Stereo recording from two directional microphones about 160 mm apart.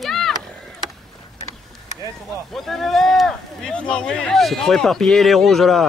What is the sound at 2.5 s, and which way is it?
Speech, centre (ahead or behind).